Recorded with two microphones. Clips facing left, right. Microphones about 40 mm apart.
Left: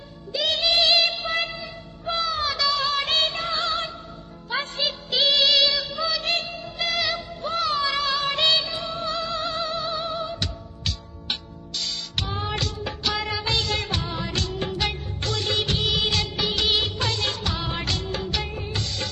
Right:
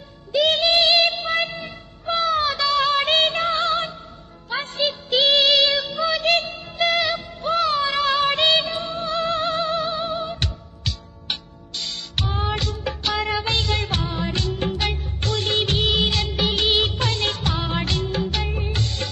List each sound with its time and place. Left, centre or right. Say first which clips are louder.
0.3 s music: right 4 dB; right
2.5 s music: right 2 dB; right
2.7 s music: right 5 dB; right
11.9 s music: right 3 dB; right
12.5 s music: right 3 dB; centre
12.8 s music of bollywood: right 3 dB; right
14.1 s music of bollywood: right 3 dB; centre
14.8 s music of bollywood: right 1 dB; right
16.2 s music: right 3 dB; right
18.5 s music of bollywood: right 3 dB; right